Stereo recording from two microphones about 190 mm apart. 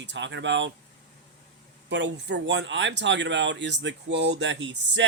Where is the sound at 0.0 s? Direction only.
70° right (ahead or behind).